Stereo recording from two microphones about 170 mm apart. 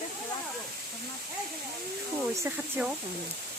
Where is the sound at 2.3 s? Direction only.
15° right (ahead or behind).